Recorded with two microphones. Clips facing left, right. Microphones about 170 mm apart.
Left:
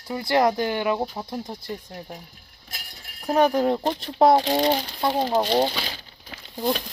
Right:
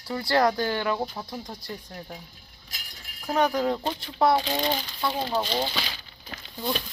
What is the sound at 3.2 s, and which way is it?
Speech, 30° left (ahead or behind).